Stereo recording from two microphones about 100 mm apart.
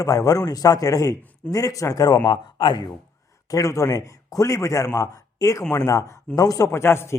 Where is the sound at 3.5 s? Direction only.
30° left (ahead or behind).